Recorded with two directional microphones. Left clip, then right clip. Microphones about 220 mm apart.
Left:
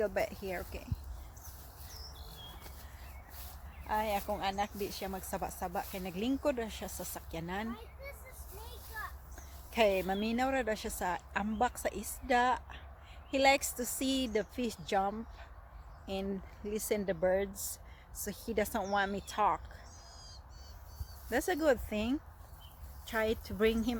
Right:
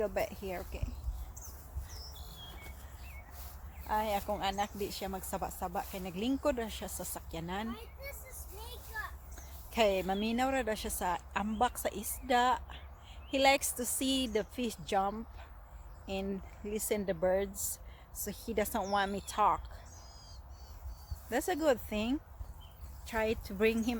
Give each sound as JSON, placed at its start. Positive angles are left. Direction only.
{"t": 0.0, "sound": "a woman's voice", "side_deg": 0}
{"t": 3.8, "sound": "speech", "side_deg": -10}
{"t": 7.7, "sound": "speech", "side_deg": -45}
{"t": 8.9, "sound": "children playing", "side_deg": -40}
{"t": 9.7, "sound": "a woman's voice", "side_deg": -5}
{"t": 21.2, "sound": "a woman's voice", "side_deg": 0}